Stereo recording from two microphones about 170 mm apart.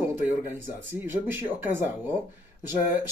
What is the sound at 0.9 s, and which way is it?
Speech, 15° right (ahead or behind).